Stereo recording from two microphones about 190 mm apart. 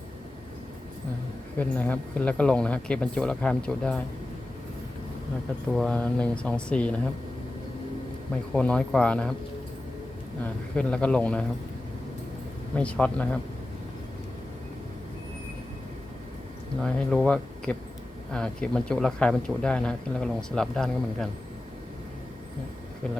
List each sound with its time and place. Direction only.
1.5 s speech: 10° left (ahead or behind)
5.7 s speech: 5° left (ahead or behind)
8.5 s speech: 5° left (ahead or behind)
10.4 s speech: 5° left (ahead or behind)
12.7 s speech: 5° left (ahead or behind)
16.8 s speech: 5° left (ahead or behind)